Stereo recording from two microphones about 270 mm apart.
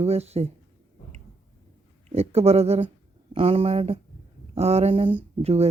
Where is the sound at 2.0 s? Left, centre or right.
Right.